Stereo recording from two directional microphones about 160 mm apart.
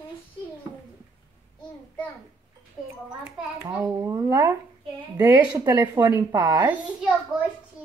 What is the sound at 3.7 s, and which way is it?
A woman's voice, 15° right (ahead or behind).